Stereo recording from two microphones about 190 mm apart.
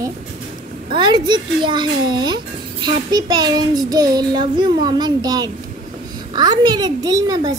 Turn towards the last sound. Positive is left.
turn(degrees=-20)  # may be behind; listen again after turning